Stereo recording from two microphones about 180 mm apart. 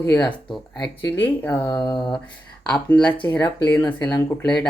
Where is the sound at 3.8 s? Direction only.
25° left (ahead or behind).